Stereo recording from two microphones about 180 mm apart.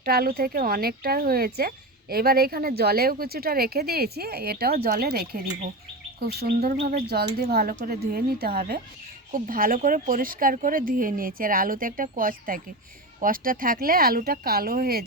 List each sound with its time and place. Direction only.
0.0 s speech: 55° right (ahead or behind)